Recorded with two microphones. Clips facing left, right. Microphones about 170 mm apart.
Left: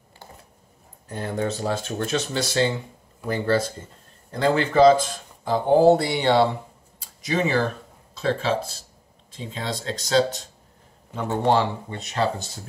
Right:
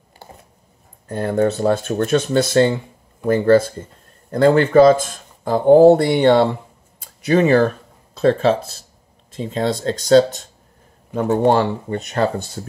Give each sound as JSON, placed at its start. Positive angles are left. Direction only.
{"t": 1.0, "sound": "speech", "side_deg": -55}
{"t": 7.0, "sound": "a sound", "side_deg": -55}
{"t": 8.2, "sound": "speech", "side_deg": -55}
{"t": 11.1, "sound": "speech", "side_deg": -45}